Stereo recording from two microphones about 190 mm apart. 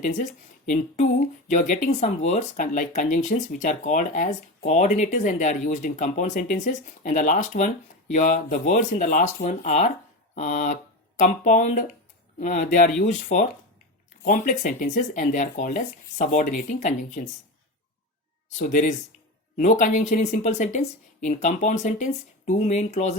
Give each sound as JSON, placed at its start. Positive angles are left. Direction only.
{"t": 0.0, "sound": "speech", "side_deg": 40}
{"t": 18.5, "sound": "speech", "side_deg": 40}